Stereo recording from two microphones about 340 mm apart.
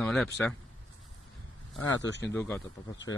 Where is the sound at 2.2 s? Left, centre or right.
Centre.